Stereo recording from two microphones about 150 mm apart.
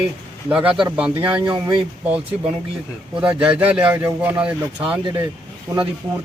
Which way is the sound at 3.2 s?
5° right (ahead or behind).